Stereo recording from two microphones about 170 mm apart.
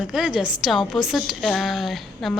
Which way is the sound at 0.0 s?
5° right (ahead or behind).